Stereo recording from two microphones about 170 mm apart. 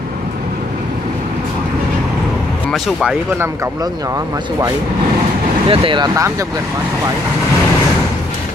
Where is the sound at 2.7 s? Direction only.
Centre (ahead or behind).